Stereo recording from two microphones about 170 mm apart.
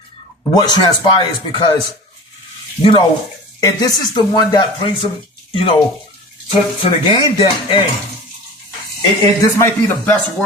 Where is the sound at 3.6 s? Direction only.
20° left (ahead or behind).